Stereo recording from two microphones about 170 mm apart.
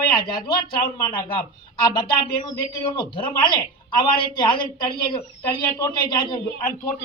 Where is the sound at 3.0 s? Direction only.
30° left (ahead or behind).